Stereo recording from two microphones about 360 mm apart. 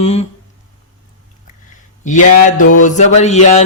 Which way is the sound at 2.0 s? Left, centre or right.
Left.